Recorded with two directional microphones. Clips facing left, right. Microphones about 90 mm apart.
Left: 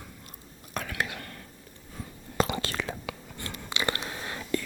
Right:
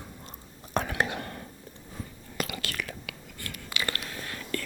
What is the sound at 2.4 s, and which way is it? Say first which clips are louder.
Whispering: left 6 dB; 30° left (ahead or behind).